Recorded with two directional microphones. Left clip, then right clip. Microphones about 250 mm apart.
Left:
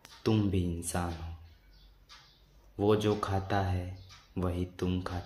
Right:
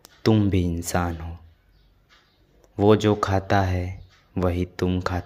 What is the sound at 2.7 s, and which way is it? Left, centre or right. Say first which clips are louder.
Speech: right 9 dB; right.